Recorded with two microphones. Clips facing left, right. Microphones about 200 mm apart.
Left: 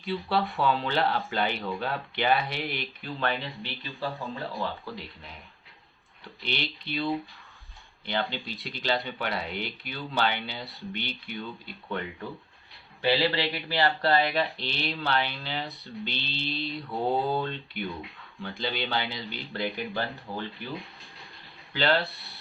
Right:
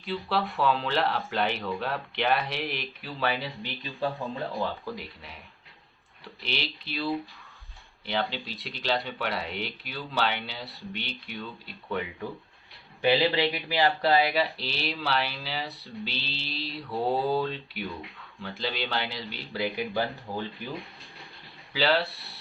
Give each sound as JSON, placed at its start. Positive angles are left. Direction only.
{"t": 0.0, "sound": "speech", "side_deg": 0}
{"t": 4.1, "sound": "speech", "side_deg": 0}
{"t": 6.2, "sound": "speech", "side_deg": 0}
{"t": 13.0, "sound": "speech", "side_deg": -20}
{"t": 20.3, "sound": "speech", "side_deg": -15}
{"t": 20.7, "sound": "a sound", "side_deg": 0}
{"t": 21.7, "sound": "speech", "side_deg": -5}